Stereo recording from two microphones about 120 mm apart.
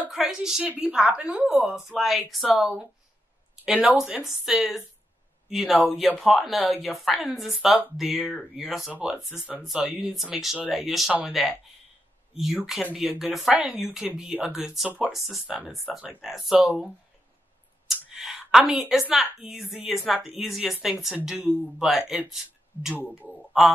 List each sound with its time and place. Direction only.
0.1 s speech: 5° right (ahead or behind)
17.8 s a woman's voice: 5° right (ahead or behind)
21.4 s speech: 15° right (ahead or behind)
21.8 s speech: centre (ahead or behind)